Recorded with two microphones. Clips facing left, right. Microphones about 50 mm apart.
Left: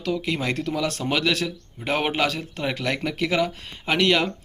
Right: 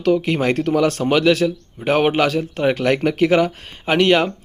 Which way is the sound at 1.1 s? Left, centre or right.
Centre.